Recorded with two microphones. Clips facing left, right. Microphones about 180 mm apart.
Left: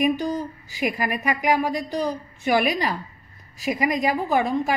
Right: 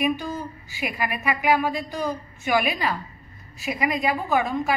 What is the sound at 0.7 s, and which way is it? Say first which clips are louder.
A woman's voice: left 4 dB; 40° left (ahead or behind).